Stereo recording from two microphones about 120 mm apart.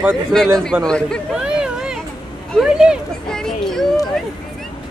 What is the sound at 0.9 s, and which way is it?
Speech, 5° left (ahead or behind).